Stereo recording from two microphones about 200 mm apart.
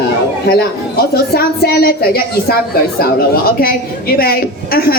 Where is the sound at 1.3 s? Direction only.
50° left (ahead or behind).